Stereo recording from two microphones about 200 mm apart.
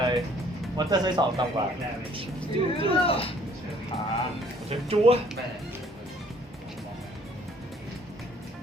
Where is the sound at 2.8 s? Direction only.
30° left (ahead or behind).